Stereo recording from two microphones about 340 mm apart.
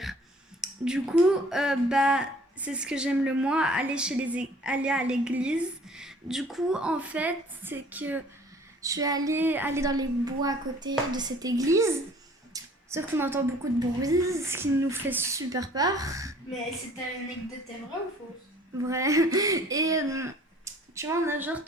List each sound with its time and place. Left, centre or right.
0.6 s a woman's voice: centre
18.9 s speech: centre